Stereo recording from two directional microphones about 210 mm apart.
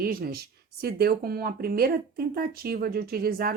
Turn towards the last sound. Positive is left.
turn(degrees=-45)  # may be behind; listen again after turning